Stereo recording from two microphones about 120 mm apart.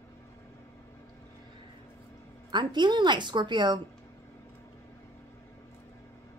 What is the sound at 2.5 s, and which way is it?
A woman's voice, 40° right (ahead or behind).